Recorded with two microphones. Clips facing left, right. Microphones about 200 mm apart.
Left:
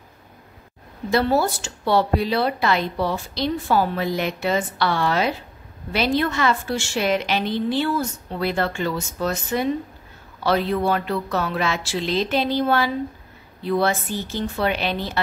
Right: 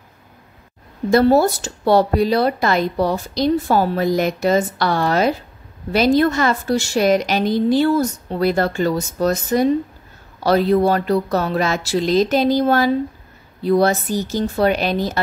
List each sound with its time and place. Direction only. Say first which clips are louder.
1.4 s a woman's voice: right 6 dB; 40° right (ahead or behind)